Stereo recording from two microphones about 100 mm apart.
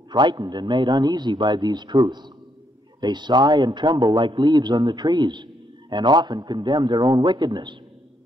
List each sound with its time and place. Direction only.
0.1 s a man's voice: 45° right (ahead or behind)